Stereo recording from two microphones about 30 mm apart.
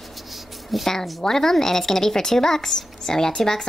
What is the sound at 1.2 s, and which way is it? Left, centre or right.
Speech, centre.